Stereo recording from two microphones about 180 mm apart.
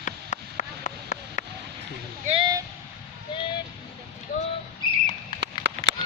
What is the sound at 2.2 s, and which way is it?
Speech, 30° right (ahead or behind).